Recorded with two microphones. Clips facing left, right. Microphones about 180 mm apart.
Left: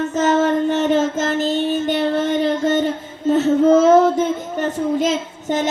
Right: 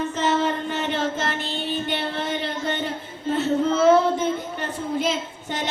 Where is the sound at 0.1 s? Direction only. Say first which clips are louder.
Left 6 dB; 45° left (ahead or behind).